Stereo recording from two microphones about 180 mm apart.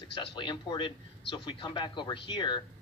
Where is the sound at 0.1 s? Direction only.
25° left (ahead or behind).